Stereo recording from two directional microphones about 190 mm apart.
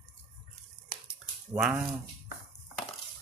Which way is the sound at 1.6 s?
5° right (ahead or behind).